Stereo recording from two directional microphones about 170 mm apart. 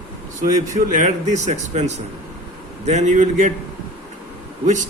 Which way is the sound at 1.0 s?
45° right (ahead or behind).